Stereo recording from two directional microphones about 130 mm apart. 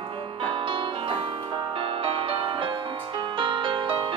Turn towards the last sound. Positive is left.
turn(degrees=-40)  # may be behind; listen again after turning